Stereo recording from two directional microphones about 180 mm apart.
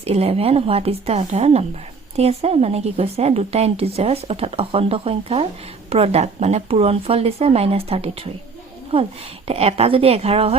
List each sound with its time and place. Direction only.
0.0 s a woman's voice: 35° right (ahead or behind)